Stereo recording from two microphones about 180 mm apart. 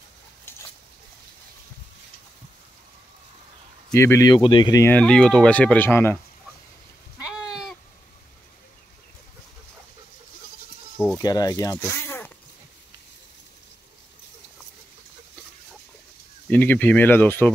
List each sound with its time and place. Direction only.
0.5 s a sound: 15° left (ahead or behind)
3.9 s speech: 15° left (ahead or behind)
7.3 s sheep: 5° right (ahead or behind)
11.1 s speech: 20° left (ahead or behind)
16.4 s speech: 10° left (ahead or behind)